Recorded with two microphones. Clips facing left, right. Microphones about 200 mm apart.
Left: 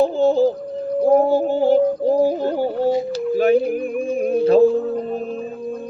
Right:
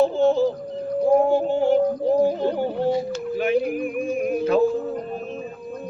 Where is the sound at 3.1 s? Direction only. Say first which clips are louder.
Left 6 dB; 35° left (ahead or behind).